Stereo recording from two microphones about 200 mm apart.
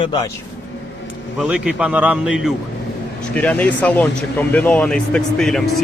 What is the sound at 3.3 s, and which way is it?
A man's voice, 5° left (ahead or behind).